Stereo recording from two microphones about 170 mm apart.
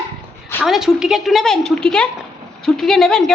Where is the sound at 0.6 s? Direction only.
Centre (ahead or behind).